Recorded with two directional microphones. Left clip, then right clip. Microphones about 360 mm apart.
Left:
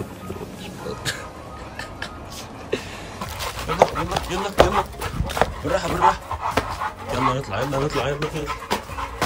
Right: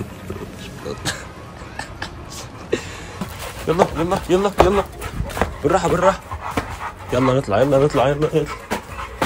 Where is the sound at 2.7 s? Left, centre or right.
Centre.